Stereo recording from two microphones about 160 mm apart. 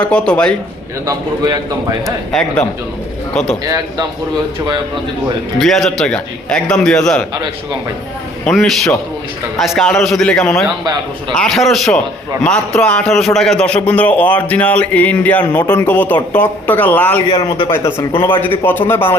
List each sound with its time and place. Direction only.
0.1 s a man's voice: 5° left (ahead or behind)
1.0 s a man's voice: 25° right (ahead or behind)
3.3 s a man's voice: 5° left (ahead or behind)
3.6 s a man's voice: 25° right (ahead or behind)
5.5 s a man's voice: centre (ahead or behind)
8.4 s a man's voice: centre (ahead or behind)
17.2 s a man's voice: 30° left (ahead or behind)
17.7 s a man's voice: 15° left (ahead or behind)